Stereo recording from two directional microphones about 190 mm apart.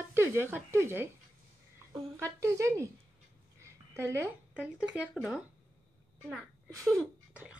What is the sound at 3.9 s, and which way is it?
Speech, 15° right (ahead or behind).